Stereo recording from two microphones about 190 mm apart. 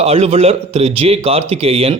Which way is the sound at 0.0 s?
30° right (ahead or behind).